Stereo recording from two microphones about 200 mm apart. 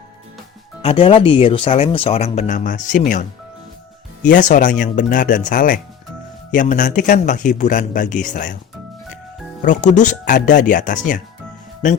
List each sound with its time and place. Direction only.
0.8 s speech: 30° left (ahead or behind)
9.6 s speech: 40° left (ahead or behind)